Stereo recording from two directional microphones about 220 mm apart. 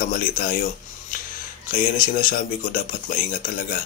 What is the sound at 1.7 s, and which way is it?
Speech, 40° left (ahead or behind).